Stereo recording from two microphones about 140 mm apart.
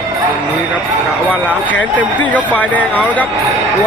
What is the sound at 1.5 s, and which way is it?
Speech, 10° left (ahead or behind).